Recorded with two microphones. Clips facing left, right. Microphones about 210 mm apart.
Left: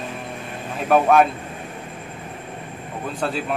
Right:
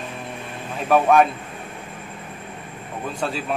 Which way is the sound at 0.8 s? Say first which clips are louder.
Even; centre (ahead or behind).